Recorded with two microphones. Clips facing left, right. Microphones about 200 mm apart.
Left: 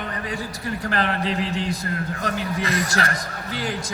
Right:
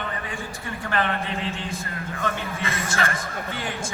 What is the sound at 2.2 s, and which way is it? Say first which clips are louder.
Speech: even; 40° left (ahead or behind).